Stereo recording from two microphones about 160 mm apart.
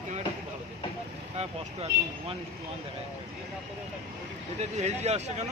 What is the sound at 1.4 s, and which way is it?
Speech, 40° right (ahead or behind).